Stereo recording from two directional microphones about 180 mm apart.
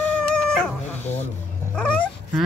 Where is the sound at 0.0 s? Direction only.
5° left (ahead or behind).